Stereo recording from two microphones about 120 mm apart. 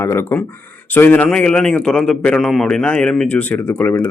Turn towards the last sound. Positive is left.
turn(degrees=15)  # may be behind; listen again after turning